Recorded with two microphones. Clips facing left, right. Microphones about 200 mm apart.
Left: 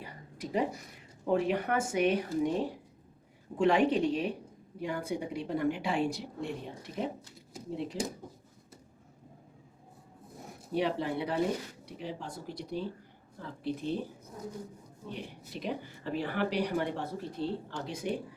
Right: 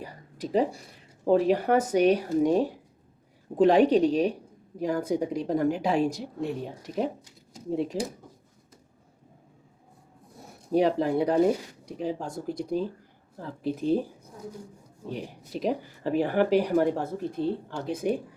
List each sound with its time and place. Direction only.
0.0 s a sound: 35° right (ahead or behind)
1.2 s a woman's voice: 35° right (ahead or behind)
3.5 s a woman's voice: 35° right (ahead or behind)
10.8 s speech: 40° right (ahead or behind)
15.1 s speech: 40° right (ahead or behind)